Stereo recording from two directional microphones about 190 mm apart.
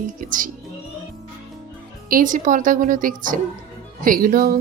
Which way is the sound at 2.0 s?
45° right (ahead or behind).